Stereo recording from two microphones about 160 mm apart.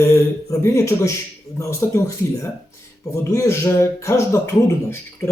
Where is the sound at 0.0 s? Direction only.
15° left (ahead or behind).